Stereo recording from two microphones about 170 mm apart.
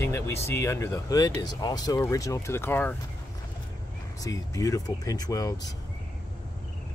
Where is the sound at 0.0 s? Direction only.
15° left (ahead or behind).